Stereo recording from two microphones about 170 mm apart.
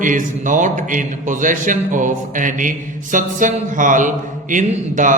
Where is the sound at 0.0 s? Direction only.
50° right (ahead or behind).